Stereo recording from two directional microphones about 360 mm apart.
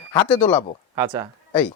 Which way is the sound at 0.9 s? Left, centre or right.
Centre.